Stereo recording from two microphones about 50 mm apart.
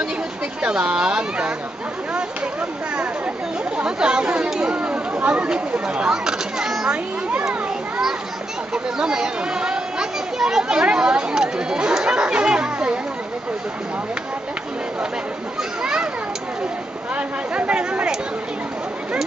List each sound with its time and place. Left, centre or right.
0.6 s speech: right
3.7 s speech: centre
4.7 s speech: right; by 6.9 s centre
8.7 s speech: centre
15.8 s speech: centre
17.1 s speech: right